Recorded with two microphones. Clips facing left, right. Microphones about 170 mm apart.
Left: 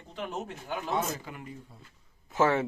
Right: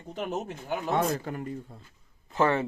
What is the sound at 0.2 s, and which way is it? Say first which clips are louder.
Speech: right 3 dB; 45° right (ahead or behind).